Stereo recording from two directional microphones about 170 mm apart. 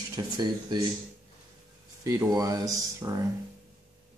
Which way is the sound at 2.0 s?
20° right (ahead or behind).